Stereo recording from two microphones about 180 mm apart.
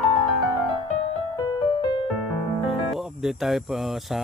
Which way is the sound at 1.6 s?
25° left (ahead or behind).